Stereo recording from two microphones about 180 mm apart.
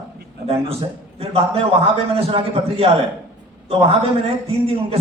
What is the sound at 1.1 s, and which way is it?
A man's voice, 35° right (ahead or behind).